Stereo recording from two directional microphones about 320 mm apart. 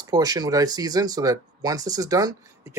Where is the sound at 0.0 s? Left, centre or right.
Centre.